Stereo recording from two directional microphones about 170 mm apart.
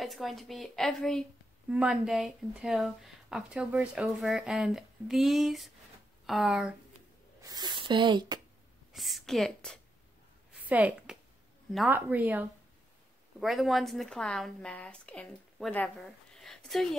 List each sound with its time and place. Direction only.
0.0 s speech: centre (ahead or behind)
7.4 s speech: 25° right (ahead or behind)
8.9 s speech: centre (ahead or behind)
10.5 s a sound: 10° right (ahead or behind)
11.9 s speech: 10° right (ahead or behind); by 15.9 s 10° left (ahead or behind)
16.3 s a sound: centre (ahead or behind)